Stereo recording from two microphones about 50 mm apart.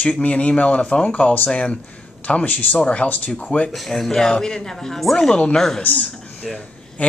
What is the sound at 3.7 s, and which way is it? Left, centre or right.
A woman's voice, centre.